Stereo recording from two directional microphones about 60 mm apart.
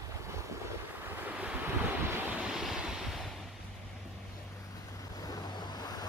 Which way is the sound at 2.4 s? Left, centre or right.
Centre.